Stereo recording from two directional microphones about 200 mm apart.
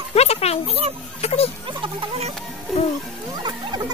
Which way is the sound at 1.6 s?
25° right (ahead or behind).